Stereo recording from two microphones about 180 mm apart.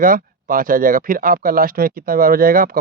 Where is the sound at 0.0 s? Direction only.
50° right (ahead or behind).